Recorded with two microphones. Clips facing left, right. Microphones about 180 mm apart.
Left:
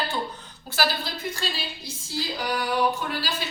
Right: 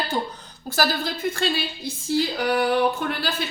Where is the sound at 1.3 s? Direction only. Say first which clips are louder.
Right 7 dB; 55° right (ahead or behind).